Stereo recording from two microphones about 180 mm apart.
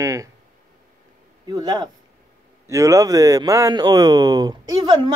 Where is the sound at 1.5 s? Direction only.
20° right (ahead or behind).